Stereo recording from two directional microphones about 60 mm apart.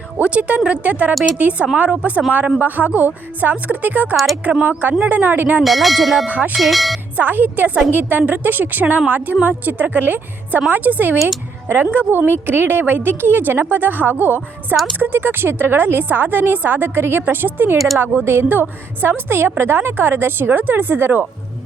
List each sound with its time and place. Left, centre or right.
0.2 s a woman's voice: right
5.6 s bell: centre
6.2 s a woman's voice: right
6.6 s bell: centre
7.2 s a woman's voice: right
17.7 s bell: centre
18.0 s speech: right